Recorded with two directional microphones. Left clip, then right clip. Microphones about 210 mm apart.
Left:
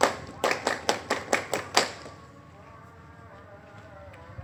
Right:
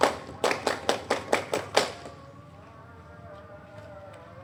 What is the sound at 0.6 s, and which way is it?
Clapping, 55° left (ahead or behind).